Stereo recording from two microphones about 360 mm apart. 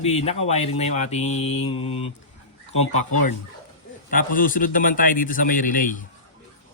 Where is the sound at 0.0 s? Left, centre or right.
Centre.